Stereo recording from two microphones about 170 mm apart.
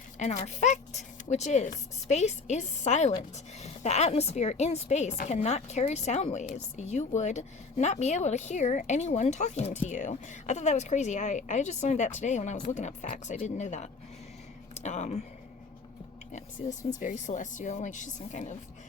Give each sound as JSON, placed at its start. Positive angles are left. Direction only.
{"t": 0.2, "sound": "a woman's voice", "side_deg": 40}
{"t": 16.3, "sound": "a woman's voice", "side_deg": 45}